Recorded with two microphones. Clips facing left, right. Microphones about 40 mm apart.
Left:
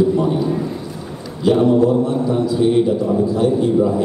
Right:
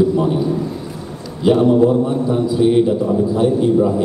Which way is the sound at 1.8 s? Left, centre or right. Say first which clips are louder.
Right 1 dB; centre.